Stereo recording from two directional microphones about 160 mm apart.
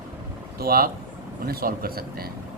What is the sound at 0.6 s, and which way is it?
A man's voice, 70° right (ahead or behind).